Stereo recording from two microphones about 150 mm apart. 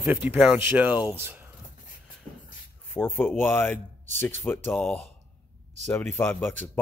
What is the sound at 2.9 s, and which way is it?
Speech, 10° left (ahead or behind).